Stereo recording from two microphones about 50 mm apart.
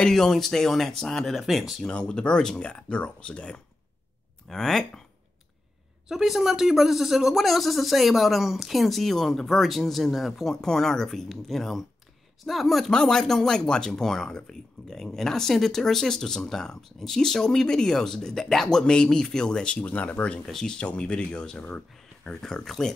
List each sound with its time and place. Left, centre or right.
0.0 s speech: centre
1.9 s speech: centre
4.5 s speech: centre
6.0 s speech: centre
10.5 s speech: centre
12.9 s speech: centre
19.8 s speech: left
20.4 s speech: centre
20.7 s speech: left
21.6 s a sound: left
22.3 s speech: centre